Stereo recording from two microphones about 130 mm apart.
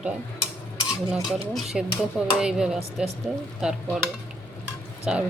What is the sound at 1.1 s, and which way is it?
Speech, centre (ahead or behind).